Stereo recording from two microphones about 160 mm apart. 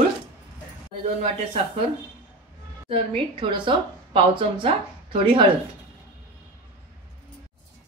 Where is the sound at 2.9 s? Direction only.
35° right (ahead or behind).